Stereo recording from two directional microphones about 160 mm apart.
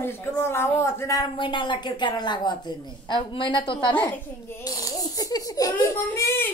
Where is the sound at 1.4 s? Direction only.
30° left (ahead or behind).